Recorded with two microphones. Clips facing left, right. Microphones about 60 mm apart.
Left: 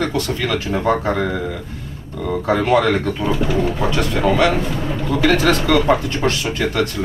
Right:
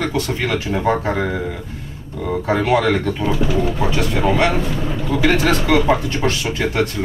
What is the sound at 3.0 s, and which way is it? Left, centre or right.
Speech, centre.